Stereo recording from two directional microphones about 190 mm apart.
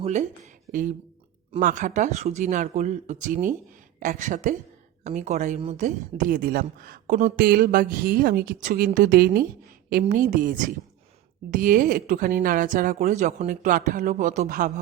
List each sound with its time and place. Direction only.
0.0 s a woman's voice: 35° right (ahead or behind)